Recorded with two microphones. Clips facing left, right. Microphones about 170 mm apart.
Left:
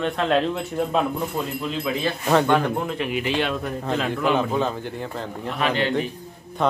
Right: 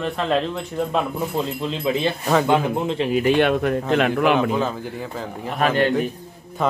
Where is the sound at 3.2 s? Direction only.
55° right (ahead or behind).